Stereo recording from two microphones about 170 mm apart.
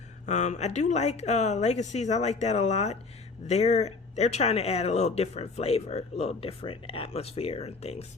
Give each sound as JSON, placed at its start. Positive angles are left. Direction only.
{"t": 0.3, "sound": "speech", "side_deg": 45}